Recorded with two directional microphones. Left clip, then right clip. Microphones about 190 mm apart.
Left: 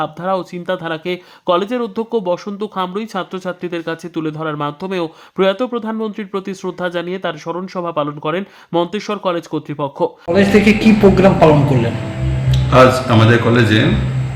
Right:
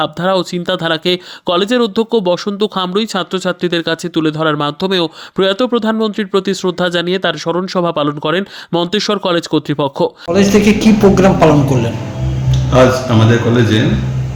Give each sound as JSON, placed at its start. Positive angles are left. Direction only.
{"t": 0.0, "sound": "speech", "side_deg": -25}
{"t": 10.3, "sound": "a woman's voice", "side_deg": -10}